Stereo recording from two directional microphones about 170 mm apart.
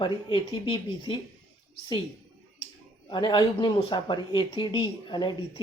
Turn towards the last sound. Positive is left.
turn(degrees=25)  # may be behind; listen again after turning